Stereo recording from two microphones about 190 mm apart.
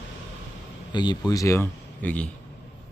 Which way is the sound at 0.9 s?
20° left (ahead or behind).